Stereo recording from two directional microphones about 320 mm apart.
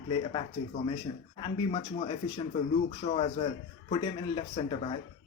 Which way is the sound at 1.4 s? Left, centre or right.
Centre.